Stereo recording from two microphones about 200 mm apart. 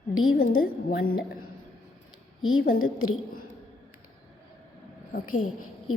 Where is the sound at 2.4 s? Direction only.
90° left.